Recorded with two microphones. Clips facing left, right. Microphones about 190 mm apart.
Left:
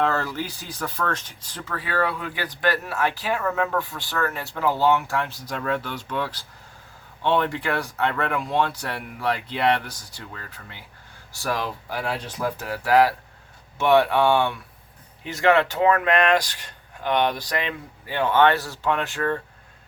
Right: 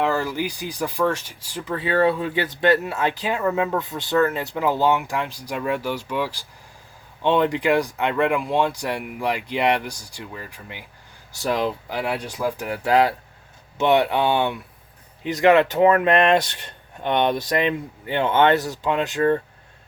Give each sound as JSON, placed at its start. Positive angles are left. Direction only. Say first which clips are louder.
{"t": 0.0, "sound": "speech", "louder": "right 2 dB", "side_deg": -10}
{"t": 1.7, "sound": "speech", "louder": "right 6 dB", "side_deg": -25}